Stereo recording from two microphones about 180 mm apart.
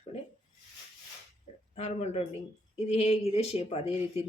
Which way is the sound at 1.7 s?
35° left (ahead or behind).